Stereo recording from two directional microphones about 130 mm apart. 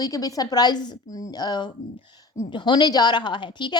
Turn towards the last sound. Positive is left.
turn(degrees=35)  # may be behind; listen again after turning